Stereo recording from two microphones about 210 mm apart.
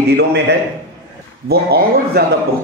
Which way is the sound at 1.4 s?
50° right (ahead or behind).